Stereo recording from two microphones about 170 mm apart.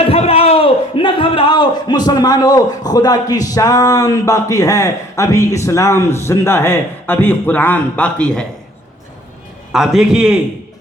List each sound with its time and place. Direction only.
0.0 s a man's voice: 35° left (ahead or behind); by 8.4 s 5° left (ahead or behind)
9.7 s a man's voice: 5° right (ahead or behind)